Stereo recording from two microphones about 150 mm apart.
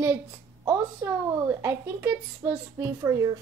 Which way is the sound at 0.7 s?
15° right (ahead or behind).